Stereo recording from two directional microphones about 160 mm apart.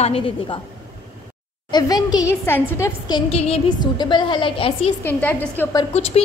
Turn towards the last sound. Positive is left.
turn(degrees=40)  # may be behind; listen again after turning